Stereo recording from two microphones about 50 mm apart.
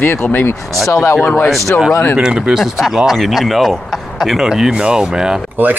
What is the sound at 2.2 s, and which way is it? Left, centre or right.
Speech, centre.